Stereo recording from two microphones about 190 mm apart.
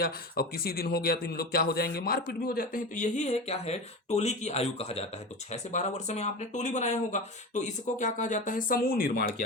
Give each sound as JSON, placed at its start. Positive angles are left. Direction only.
{"t": 0.0, "sound": "speech", "side_deg": 55}